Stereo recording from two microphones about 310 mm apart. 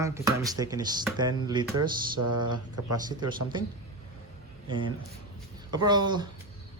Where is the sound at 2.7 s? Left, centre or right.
Right.